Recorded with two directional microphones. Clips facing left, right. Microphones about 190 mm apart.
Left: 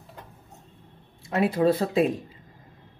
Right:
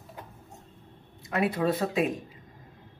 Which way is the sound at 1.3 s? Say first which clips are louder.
Left 5 dB; 30° left (ahead or behind).